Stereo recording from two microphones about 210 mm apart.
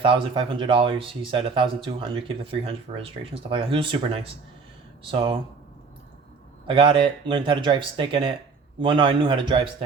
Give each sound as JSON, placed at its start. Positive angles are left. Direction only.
{"t": 0.0, "sound": "speech", "side_deg": -25}
{"t": 6.7, "sound": "speech", "side_deg": -25}